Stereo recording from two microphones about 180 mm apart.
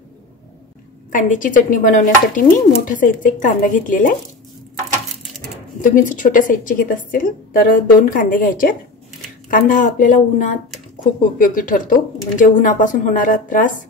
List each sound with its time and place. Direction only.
1.1 s speech: 45° left (ahead or behind)
5.8 s speech: 45° left (ahead or behind)